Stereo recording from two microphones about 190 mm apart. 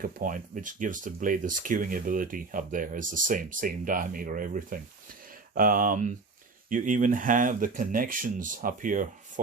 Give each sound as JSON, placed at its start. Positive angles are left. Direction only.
{"t": 0.0, "sound": "speech", "side_deg": -45}